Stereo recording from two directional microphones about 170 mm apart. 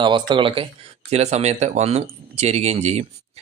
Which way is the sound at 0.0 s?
30° right (ahead or behind).